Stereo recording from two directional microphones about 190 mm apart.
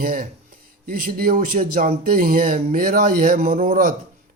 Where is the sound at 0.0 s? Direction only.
45° right (ahead or behind).